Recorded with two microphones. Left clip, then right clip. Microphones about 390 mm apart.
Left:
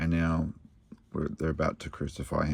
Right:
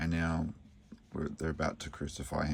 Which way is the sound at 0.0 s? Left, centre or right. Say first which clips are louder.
Left 4 dB; centre.